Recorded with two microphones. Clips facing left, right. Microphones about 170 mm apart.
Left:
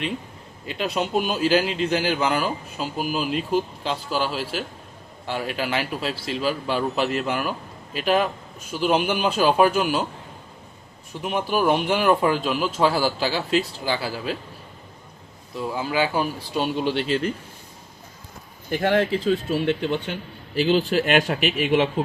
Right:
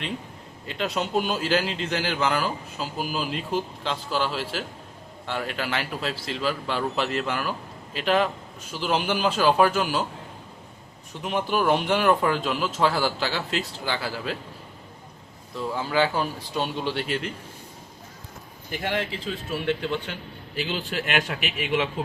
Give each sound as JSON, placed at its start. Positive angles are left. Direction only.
{"t": 0.7, "sound": "a man's voice", "side_deg": 10}
{"t": 11.2, "sound": "a man's voice", "side_deg": 10}
{"t": 15.5, "sound": "a man's voice", "side_deg": 10}
{"t": 18.7, "sound": "speech", "side_deg": 50}
{"t": 20.6, "sound": "a man's voice", "side_deg": 45}